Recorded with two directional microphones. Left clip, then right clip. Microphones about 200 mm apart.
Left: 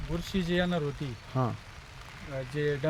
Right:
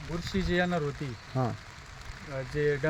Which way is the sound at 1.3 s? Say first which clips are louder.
Even; 5° right (ahead or behind).